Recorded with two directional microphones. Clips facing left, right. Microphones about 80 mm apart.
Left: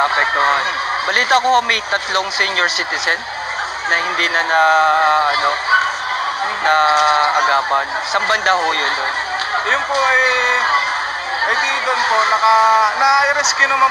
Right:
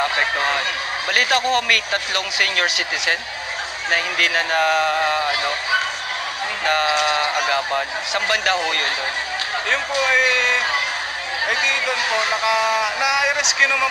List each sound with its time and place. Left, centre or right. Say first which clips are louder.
0.0 s speech: left 6 dB; left
3.9 s speech: left 3 dB; left